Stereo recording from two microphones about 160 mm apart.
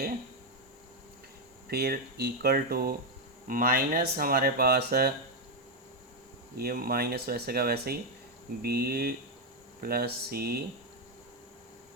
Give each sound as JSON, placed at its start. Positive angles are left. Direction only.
{"t": 1.7, "sound": "speech", "side_deg": -80}
{"t": 3.4, "sound": "speech", "side_deg": -60}
{"t": 6.6, "sound": "speech", "side_deg": -70}